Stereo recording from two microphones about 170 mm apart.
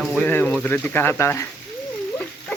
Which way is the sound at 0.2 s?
10° left (ahead or behind).